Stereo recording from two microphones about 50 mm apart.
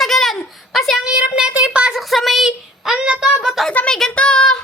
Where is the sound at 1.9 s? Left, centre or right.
Centre.